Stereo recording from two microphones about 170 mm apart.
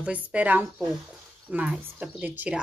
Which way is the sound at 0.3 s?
10° right (ahead or behind).